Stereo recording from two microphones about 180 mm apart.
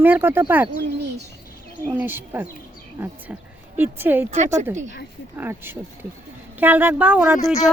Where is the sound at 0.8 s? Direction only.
70° right (ahead or behind).